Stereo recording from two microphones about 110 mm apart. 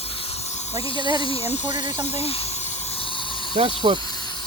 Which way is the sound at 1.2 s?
60° left (ahead or behind).